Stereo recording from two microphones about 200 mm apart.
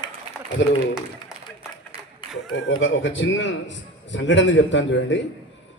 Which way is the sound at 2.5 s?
70° left (ahead or behind).